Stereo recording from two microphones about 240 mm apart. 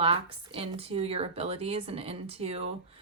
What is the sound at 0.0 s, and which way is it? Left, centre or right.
Speech, right.